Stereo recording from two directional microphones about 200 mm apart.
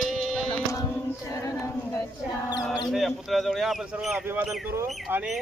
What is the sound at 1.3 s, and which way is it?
Music, 15° left (ahead or behind).